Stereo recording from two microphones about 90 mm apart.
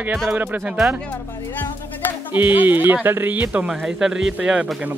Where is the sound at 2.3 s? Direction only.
20° right (ahead or behind).